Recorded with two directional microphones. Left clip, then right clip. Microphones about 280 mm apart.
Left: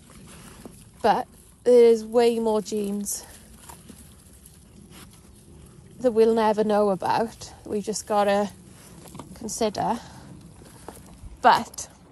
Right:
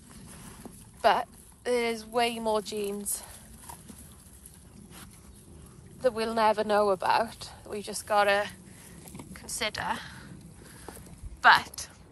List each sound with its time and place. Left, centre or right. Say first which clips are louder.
0.3 s boat: left 3 dB; centre
1.0 s speech: left 2 dB; left
3.6 s a sound: left 1 dB; centre
5.9 s speech: left 7 dB; left